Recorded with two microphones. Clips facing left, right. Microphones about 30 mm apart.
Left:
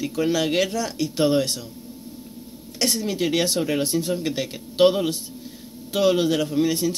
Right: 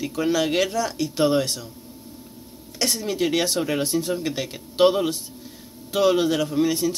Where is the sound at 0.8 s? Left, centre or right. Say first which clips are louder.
Even; left.